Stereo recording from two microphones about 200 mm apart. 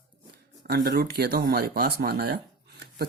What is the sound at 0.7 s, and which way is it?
Speech, 55° right (ahead or behind).